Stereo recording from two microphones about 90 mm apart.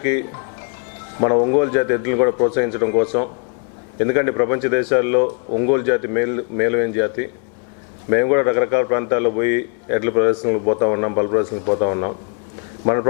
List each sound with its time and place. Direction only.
0.0 s music: 20° left (ahead or behind)
1.1 s a man's voice: 25° left (ahead or behind)